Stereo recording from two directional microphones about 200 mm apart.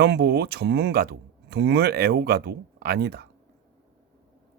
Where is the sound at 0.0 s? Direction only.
55° right (ahead or behind).